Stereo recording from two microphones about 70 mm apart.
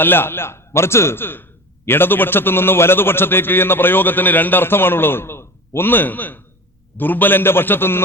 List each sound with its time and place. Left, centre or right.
0.0 s a man's voice: left